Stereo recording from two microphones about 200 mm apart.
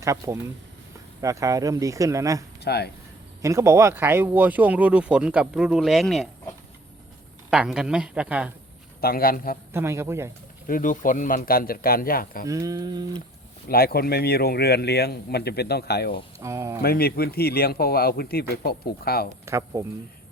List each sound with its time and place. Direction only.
0.0 s speech: 15° right (ahead or behind)
2.6 s speech: 55° left (ahead or behind)
3.4 s speech: 15° right (ahead or behind)
7.5 s a woman's voice: 5° right (ahead or behind)
9.0 s a man's voice: 50° left (ahead or behind)
9.7 s speech: 15° right (ahead or behind)
10.7 s a man's voice: 40° left (ahead or behind)
12.5 s speech: 15° right (ahead or behind)
13.7 s a man's voice: 50° left (ahead or behind)
16.4 s speech: 15° right (ahead or behind)
16.8 s a man's voice: 50° left (ahead or behind)
19.5 s speech: 15° right (ahead or behind)